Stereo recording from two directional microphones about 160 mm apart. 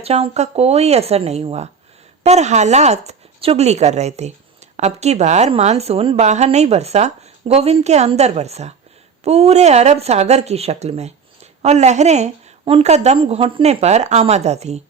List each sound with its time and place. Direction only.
0.0 s a woman's voice: 40° right (ahead or behind)